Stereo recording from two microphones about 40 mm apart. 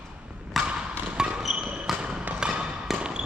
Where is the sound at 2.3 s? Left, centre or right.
Right.